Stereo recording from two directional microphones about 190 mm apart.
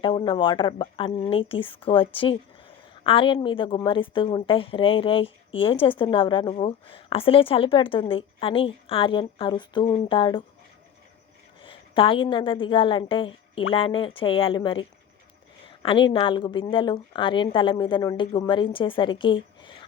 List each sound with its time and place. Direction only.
0.0 s a woman's voice: 25° left (ahead or behind)
11.6 s a woman's voice: 25° left (ahead or behind)